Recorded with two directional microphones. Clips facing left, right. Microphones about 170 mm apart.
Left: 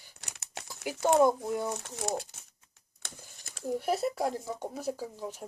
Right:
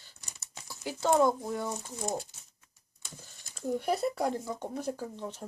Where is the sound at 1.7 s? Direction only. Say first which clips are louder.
Even; 80° left.